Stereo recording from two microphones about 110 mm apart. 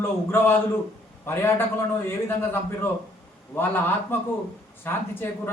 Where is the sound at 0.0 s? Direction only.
20° left (ahead or behind).